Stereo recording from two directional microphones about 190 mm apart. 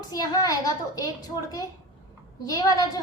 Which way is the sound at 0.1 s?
20° left (ahead or behind).